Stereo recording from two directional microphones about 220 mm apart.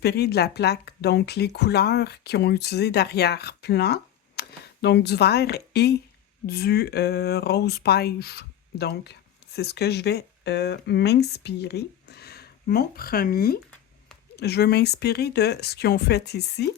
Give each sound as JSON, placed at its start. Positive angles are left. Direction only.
{"t": 0.0, "sound": "speech", "side_deg": 45}